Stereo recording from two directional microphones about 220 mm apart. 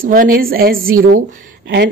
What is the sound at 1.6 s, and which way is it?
Speech, 50° right (ahead or behind).